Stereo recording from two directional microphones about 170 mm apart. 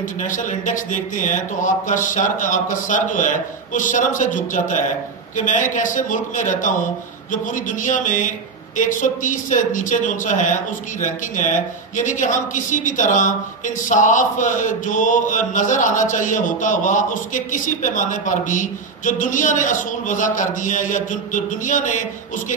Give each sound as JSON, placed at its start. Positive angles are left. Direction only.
{"t": 0.2, "sound": "speech", "side_deg": 50}